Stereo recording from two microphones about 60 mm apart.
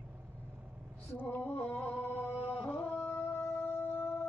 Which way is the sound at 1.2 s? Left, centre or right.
Left.